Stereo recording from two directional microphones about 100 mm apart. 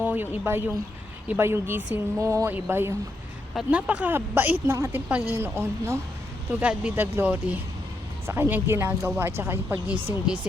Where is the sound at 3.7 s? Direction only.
15° right (ahead or behind).